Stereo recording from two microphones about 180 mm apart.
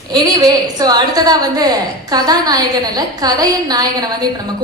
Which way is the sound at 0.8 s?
20° right (ahead or behind).